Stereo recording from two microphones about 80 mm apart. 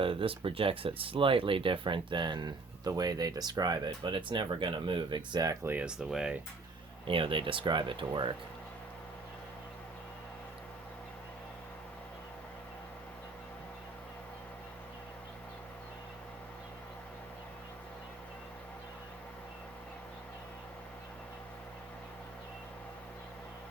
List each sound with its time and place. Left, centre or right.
0.0 s a sound: right
1.1 s speech: right
5.8 s speech: centre
7.1 s speech: right